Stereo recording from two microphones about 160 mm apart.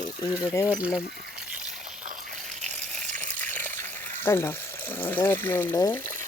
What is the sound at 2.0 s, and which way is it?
Water, 50° right (ahead or behind).